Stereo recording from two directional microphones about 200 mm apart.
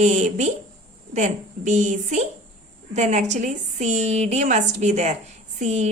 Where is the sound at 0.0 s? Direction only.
35° right (ahead or behind).